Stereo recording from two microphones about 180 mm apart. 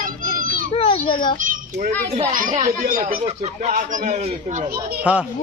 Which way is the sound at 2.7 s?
50° right (ahead or behind).